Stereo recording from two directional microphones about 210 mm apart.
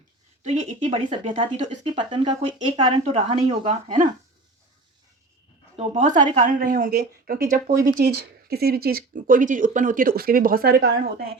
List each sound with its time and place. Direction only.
0.4 s speech: 30° right (ahead or behind)
2.0 s a woman's voice: 20° right (ahead or behind)
5.7 s speech: 35° right (ahead or behind)